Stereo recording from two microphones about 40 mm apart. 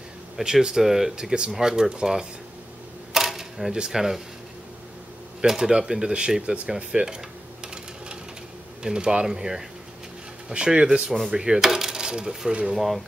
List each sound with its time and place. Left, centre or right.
0.4 s speech: centre
1.1 s speech: right
3.1 s camera: centre
3.9 s speech: centre
5.7 s speech: centre
7.6 s sewing machine: right
8.8 s speech: right
11.1 s speech: centre
11.3 s speech: centre
11.6 s coin: centre
12.7 s speech: centre